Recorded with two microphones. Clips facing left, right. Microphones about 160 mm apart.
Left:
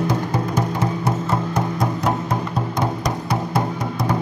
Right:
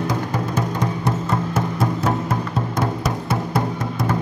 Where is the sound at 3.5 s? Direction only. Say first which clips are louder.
Even; centre (ahead or behind).